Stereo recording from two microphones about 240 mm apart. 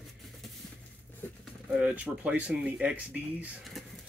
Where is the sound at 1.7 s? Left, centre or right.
Centre.